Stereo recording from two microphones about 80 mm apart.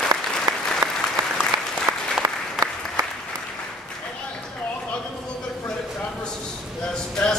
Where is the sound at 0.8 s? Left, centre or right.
Right.